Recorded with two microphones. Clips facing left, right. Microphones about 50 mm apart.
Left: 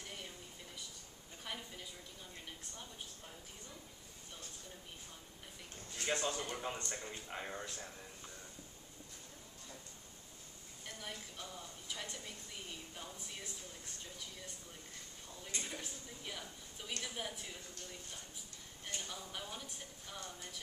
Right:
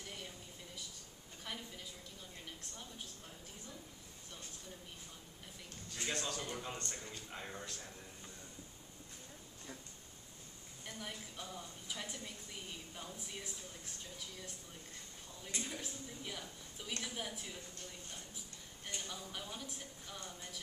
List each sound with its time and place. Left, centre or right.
1.5 s a sound: centre
6.0 s a man's voice: left
11.0 s a woman's voice: centre
15.4 s a woman's voice: centre
18.9 s a woman's voice: centre